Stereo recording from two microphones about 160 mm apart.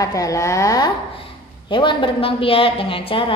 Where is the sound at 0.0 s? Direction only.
20° left (ahead or behind).